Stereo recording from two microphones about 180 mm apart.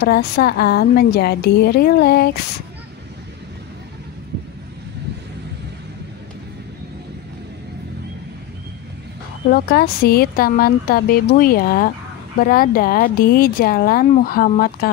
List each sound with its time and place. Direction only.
0.0 s speech: 60° left (ahead or behind)
9.5 s speech: 60° left (ahead or behind)